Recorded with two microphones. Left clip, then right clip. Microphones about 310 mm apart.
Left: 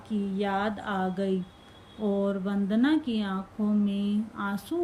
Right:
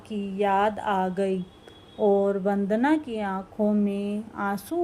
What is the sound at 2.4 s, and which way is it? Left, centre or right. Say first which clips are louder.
Speech: right 4 dB; centre.